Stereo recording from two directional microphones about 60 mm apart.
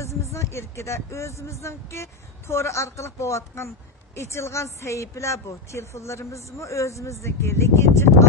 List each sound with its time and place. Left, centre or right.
0.0 s speech: left